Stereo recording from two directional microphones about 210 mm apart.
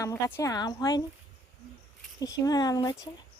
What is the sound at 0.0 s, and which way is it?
Speech, 10° left (ahead or behind).